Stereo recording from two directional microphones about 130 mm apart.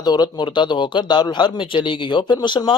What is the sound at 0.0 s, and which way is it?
Speech, 30° left (ahead or behind).